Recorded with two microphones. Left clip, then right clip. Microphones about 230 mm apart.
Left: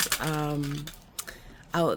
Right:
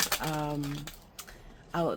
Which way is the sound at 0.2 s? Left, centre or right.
Left.